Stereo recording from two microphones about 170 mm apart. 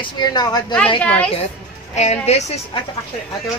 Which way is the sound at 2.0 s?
40° left (ahead or behind).